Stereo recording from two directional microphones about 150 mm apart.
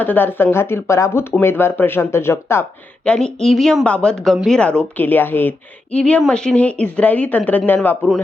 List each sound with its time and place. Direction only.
0.0 s speech: 15° left (ahead or behind)
3.0 s speech: 5° left (ahead or behind)